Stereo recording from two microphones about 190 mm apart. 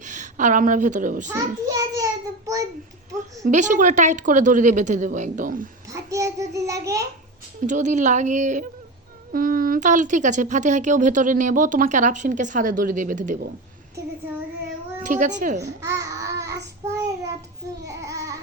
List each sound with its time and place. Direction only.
0.0 s a woman's voice: 40° right (ahead or behind)
1.3 s a child's voice: 20° right (ahead or behind)
3.2 s speech: 40° right (ahead or behind)
5.9 s child singing: 15° right (ahead or behind)
7.6 s speech: 40° right (ahead or behind)
15.0 s speech: 40° right (ahead or behind)
16.0 s babbling: 15° right (ahead or behind)
17.8 s child singing: 15° right (ahead or behind)